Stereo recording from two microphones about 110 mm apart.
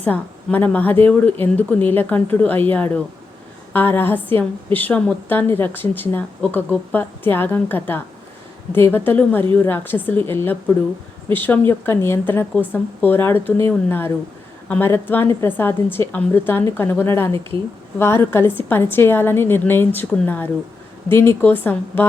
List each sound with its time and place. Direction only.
0.0 s a woman's voice: 15° left (ahead or behind)